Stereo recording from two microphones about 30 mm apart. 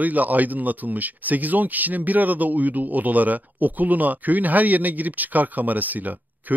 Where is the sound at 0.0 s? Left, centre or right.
Right.